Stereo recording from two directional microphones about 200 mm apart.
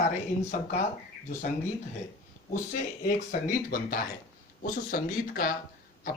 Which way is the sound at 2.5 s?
40° left (ahead or behind).